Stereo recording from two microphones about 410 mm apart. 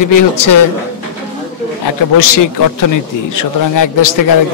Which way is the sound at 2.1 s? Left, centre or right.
Left.